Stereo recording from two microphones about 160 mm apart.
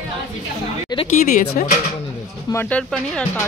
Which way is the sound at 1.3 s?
55° left (ahead or behind).